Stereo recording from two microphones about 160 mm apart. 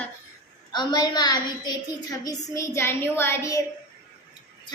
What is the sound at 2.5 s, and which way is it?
Child singing, 15° left (ahead or behind).